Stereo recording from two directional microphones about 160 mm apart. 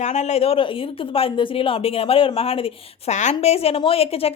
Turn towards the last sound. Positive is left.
turn(degrees=40)  # may be behind; listen again after turning